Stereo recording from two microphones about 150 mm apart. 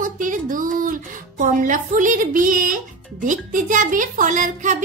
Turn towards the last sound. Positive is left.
turn(degrees=-55)  # may be behind; listen again after turning